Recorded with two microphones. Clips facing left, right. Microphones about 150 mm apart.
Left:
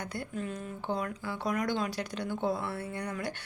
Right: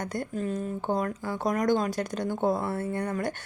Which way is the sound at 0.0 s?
45° right (ahead or behind).